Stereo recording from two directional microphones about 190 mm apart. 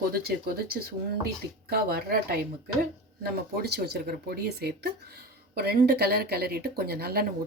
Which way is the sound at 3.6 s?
60° right (ahead or behind).